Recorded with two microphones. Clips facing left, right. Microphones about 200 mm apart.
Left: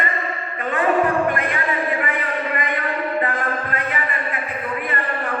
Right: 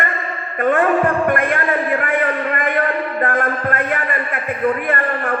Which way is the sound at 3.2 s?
50° right (ahead or behind).